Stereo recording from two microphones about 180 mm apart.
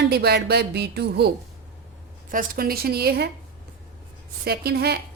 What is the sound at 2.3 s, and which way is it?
Speech, 55° right (ahead or behind).